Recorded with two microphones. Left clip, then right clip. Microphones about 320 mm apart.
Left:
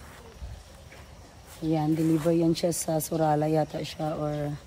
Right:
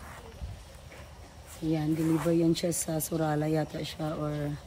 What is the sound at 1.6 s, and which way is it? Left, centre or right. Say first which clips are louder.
Speech: left 3 dB; centre.